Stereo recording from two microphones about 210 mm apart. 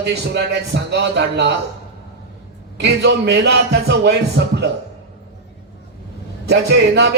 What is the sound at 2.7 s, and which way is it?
A man's voice, 55° right (ahead or behind).